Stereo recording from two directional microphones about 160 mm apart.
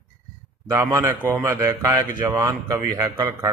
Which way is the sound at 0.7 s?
20° right (ahead or behind).